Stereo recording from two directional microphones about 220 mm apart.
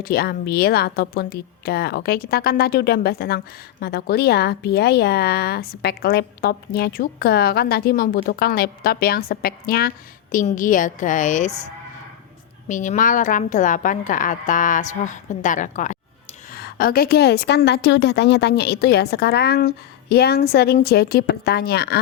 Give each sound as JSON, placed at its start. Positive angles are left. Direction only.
{"t": 0.0, "sound": "a woman's voice", "side_deg": 45}
{"t": 12.6, "sound": "a woman's voice", "side_deg": 35}